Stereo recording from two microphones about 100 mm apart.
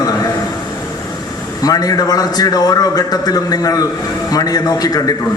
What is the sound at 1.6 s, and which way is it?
A man's voice, 40° left (ahead or behind).